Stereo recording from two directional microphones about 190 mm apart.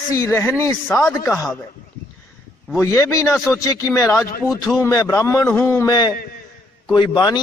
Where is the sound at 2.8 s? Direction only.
15° left (ahead or behind).